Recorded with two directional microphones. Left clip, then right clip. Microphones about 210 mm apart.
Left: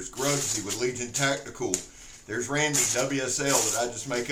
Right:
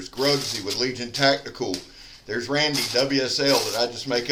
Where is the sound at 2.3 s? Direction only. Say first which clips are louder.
Right 4 dB; 25° right (ahead or behind).